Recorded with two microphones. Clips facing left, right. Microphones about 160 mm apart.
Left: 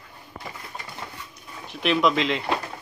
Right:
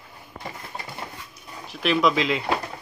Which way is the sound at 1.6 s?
Centre (ahead or behind).